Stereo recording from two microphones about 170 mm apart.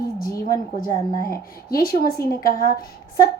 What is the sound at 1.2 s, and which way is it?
A woman's voice, 60° left (ahead or behind).